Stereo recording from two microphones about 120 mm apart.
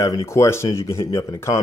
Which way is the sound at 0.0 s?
25° left (ahead or behind).